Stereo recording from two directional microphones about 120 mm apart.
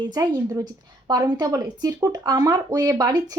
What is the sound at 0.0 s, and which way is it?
A woman's voice, 35° right (ahead or behind).